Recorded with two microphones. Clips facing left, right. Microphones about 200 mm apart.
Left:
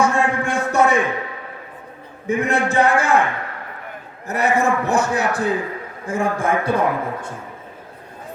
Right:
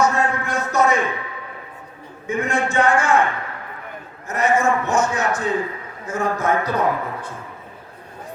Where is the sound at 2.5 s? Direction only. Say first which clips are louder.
Left 1 dB; 35° left (ahead or behind).